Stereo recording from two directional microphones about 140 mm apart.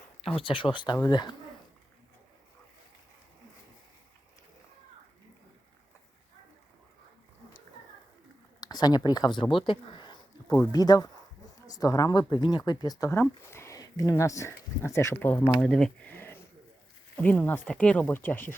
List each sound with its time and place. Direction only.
0.3 s speech: 40° left (ahead or behind)
8.6 s speech: 30° left (ahead or behind); by 18.5 s 15° left (ahead or behind)